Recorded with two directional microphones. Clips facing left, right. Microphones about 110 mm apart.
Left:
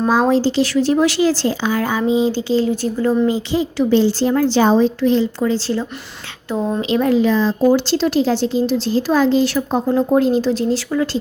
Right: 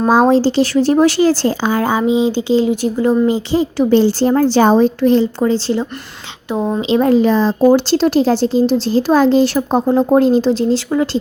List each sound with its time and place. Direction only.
0.1 s a woman's voice: 30° right (ahead or behind)
0.8 s a woman's voice: 50° right (ahead or behind)
1.3 s a woman's voice: 35° right (ahead or behind)
1.8 s speech: 25° right (ahead or behind)
3.8 s a woman's voice: 50° right (ahead or behind)
5.4 s speech: 25° right (ahead or behind)
7.1 s a woman's voice: 40° right (ahead or behind)